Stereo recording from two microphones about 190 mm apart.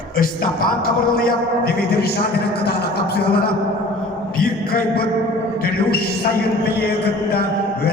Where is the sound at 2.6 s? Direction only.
55° left (ahead or behind).